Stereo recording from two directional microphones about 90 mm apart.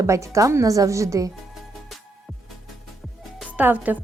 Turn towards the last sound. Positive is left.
turn(degrees=-20)  # may be behind; listen again after turning